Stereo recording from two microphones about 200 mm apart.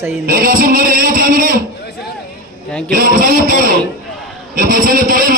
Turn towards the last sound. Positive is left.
turn(degrees=-45)  # may be behind; listen again after turning